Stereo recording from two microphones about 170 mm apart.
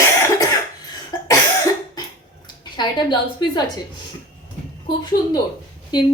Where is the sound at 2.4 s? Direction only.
25° left (ahead or behind).